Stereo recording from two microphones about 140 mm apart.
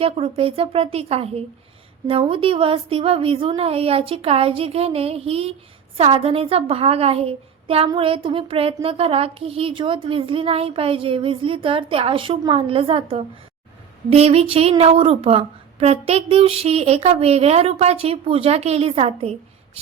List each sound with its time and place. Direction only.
0.0 s a woman's voice: 45° right (ahead or behind)